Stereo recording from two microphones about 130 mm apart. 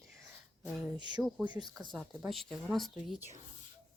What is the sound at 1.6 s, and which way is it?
Speech, 35° right (ahead or behind).